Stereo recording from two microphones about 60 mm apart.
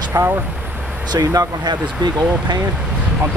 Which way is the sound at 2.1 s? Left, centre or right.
Centre.